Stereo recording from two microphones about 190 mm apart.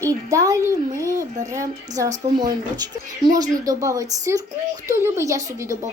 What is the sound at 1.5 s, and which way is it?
Speech, 15° right (ahead or behind).